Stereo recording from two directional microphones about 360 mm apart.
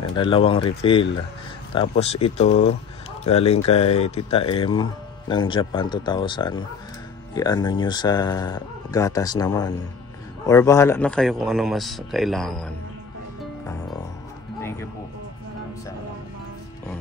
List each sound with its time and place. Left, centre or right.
0.1 s a man's voice: centre
14.6 s music: centre